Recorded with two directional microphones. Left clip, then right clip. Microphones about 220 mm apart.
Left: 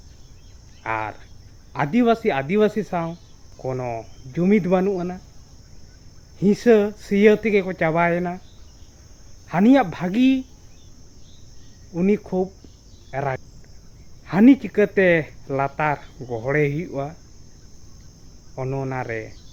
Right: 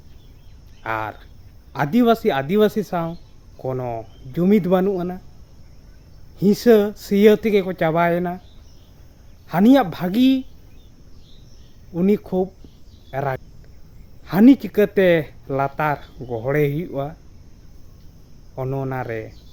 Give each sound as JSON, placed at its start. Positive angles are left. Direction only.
{"t": 0.8, "sound": "speech", "side_deg": -15}
{"t": 6.4, "sound": "speech", "side_deg": -15}
{"t": 9.5, "sound": "speech", "side_deg": -15}
{"t": 11.9, "sound": "speech", "side_deg": -15}
{"t": 18.5, "sound": "speech", "side_deg": -15}